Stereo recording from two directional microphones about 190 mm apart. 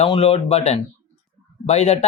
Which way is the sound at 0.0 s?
30° left (ahead or behind).